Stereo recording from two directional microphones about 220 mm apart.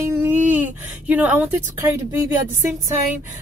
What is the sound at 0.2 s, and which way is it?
Speech, 5° right (ahead or behind).